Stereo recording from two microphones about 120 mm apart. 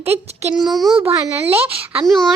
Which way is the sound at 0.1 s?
55° right (ahead or behind).